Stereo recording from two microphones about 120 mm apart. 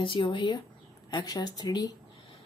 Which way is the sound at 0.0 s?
45° left (ahead or behind).